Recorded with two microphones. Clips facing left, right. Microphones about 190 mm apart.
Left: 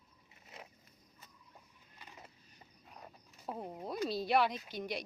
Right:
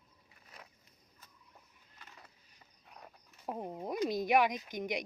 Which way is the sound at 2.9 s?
Centre (ahead or behind).